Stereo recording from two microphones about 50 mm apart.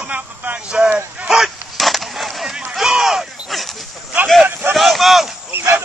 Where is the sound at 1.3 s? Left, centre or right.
Centre.